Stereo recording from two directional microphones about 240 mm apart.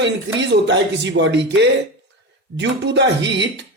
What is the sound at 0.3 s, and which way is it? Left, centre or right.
A man's voice, right.